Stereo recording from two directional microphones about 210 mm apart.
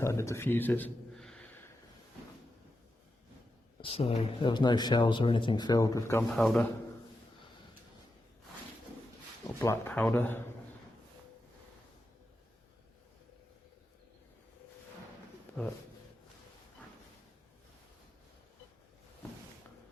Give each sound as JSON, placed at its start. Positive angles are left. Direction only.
{"t": 0.0, "sound": "a sound", "side_deg": 15}
{"t": 3.8, "sound": "speech", "side_deg": 25}
{"t": 6.3, "sound": "a man's voice", "side_deg": 0}
{"t": 9.6, "sound": "speech", "side_deg": 10}